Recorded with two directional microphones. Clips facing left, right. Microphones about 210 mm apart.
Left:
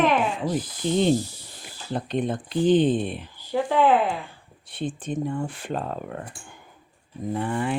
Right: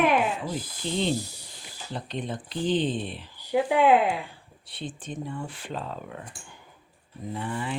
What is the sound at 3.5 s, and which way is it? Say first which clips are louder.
Speech: even; 15° right (ahead or behind).